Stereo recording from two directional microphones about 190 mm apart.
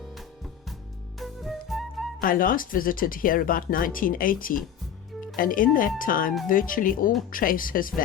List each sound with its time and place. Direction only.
1.2 s flute: centre (ahead or behind)
2.2 s speech: 50° left (ahead or behind)